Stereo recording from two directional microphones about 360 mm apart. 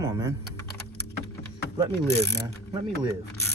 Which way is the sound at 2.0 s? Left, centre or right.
Centre.